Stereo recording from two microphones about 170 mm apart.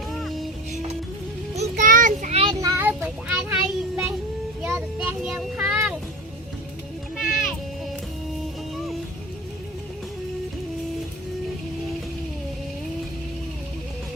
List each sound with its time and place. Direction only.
0.1 s music: centre (ahead or behind)
0.7 s music: 45° right (ahead or behind)
1.5 s child singing: 45° right (ahead or behind)
2.4 s child singing: 25° right (ahead or behind); by 6.0 s 10° right (ahead or behind)
7.2 s music: 5° right (ahead or behind)